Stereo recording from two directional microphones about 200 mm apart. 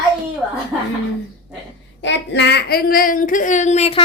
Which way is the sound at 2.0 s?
60° left (ahead or behind).